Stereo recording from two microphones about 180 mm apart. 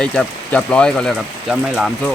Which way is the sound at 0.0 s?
5° left (ahead or behind).